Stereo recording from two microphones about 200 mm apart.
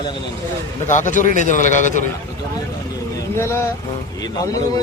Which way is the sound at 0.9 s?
40° left (ahead or behind).